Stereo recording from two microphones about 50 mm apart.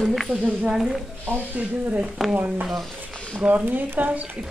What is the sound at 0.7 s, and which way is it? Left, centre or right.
Speech, centre.